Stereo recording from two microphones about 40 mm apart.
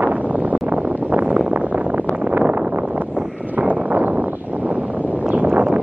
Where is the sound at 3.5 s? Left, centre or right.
Right.